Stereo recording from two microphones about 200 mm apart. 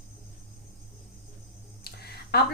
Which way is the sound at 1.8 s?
50° left (ahead or behind).